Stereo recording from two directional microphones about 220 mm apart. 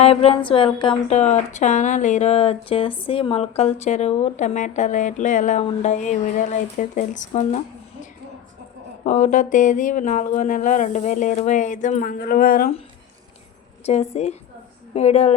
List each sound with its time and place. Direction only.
0.0 s speech: 25° left (ahead or behind)
9.0 s speech: 35° left (ahead or behind)
13.8 s speech: 30° left (ahead or behind)